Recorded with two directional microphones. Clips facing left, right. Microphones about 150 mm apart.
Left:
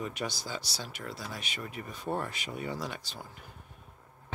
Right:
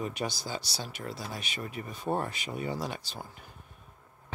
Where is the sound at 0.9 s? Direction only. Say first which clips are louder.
Right 2 dB; 30° right (ahead or behind).